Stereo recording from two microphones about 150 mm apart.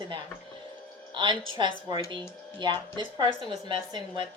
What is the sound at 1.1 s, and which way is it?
A woman's voice, 30° right (ahead or behind).